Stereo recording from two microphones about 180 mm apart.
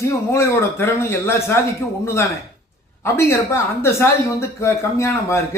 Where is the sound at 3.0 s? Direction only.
15° left (ahead or behind).